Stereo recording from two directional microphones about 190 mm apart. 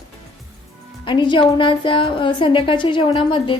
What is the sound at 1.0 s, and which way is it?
A woman's voice, 25° left (ahead or behind).